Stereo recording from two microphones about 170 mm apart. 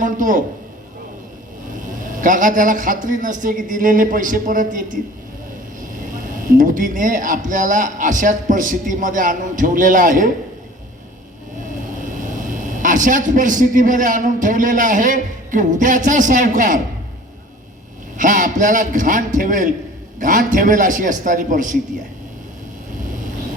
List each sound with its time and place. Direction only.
0.0 s speech: 50° right (ahead or behind)
1.8 s speech: 50° right (ahead or behind)
11.9 s a man's voice: 50° right (ahead or behind)
18.2 s speech: 50° right (ahead or behind)